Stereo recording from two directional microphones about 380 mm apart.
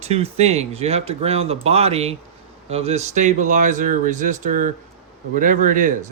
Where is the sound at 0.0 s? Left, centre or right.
Centre.